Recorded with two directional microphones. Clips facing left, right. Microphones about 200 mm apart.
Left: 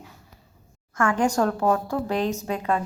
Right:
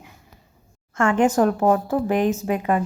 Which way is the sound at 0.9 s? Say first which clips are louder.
Right 4 dB; 25° right (ahead or behind).